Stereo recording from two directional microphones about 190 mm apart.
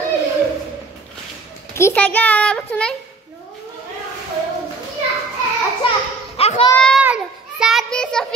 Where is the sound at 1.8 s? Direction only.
10° left (ahead or behind).